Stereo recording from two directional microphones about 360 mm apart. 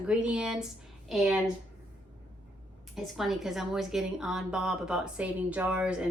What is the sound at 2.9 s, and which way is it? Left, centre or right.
A woman's voice, centre.